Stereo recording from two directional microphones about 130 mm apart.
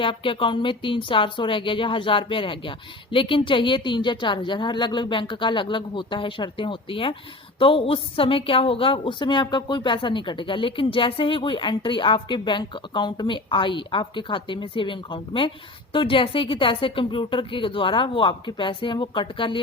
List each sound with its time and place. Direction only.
0.0 s a woman's voice: 40° left (ahead or behind)